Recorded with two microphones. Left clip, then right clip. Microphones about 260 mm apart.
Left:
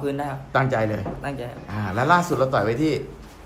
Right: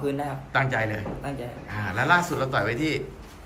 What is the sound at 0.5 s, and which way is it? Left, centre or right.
A man's voice, centre.